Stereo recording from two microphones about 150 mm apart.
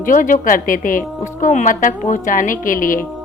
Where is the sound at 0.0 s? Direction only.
60° left (ahead or behind).